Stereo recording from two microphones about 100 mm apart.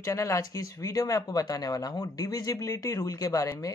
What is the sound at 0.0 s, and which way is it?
Speech, 30° left (ahead or behind).